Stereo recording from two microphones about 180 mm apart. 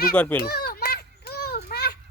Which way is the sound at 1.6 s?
55° left (ahead or behind).